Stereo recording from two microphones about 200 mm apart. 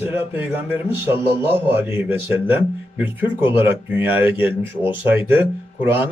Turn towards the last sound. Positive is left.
turn(degrees=-10)  # may be behind; listen again after turning